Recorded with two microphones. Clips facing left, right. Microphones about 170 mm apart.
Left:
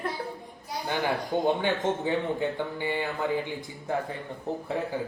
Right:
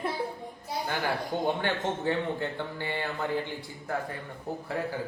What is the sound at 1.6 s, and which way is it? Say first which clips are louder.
A man's voice: left 2 dB; 15° left (ahead or behind).